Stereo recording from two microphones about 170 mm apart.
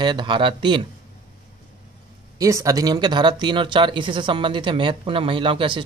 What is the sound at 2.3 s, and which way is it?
Speech, 20° right (ahead or behind).